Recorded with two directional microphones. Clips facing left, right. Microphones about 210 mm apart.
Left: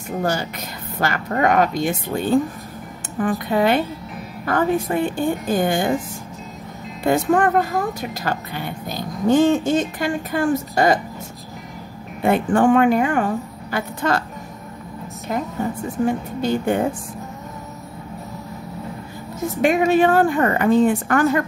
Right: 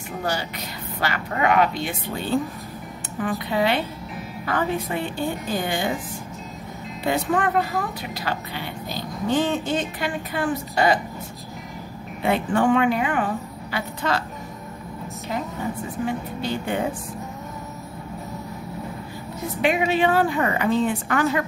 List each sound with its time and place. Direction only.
0.2 s speech: 45° left (ahead or behind)
7.0 s speech: 50° left (ahead or behind)
12.2 s speech: 50° left (ahead or behind)
16.1 s speech: 45° left (ahead or behind)
19.4 s speech: 45° left (ahead or behind)